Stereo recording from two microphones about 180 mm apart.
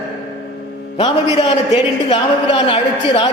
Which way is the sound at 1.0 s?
30° left (ahead or behind).